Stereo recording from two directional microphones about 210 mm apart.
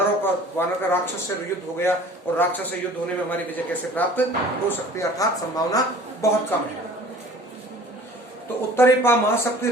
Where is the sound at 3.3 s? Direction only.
10° left (ahead or behind).